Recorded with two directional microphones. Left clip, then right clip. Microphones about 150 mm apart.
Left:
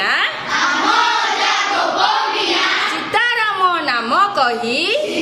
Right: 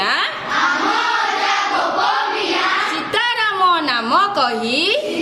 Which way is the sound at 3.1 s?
90° right.